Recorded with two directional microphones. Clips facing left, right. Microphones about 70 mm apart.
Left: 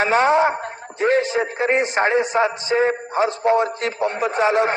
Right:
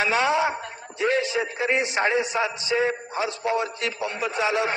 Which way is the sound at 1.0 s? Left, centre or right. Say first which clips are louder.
Left 5 dB; left.